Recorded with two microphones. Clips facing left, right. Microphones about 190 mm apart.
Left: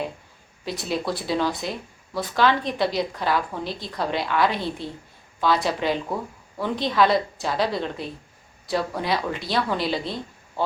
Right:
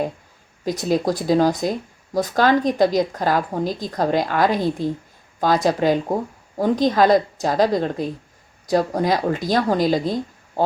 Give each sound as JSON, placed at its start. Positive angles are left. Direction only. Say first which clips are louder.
{"t": 0.6, "sound": "speech", "louder": "right 7 dB", "side_deg": -45}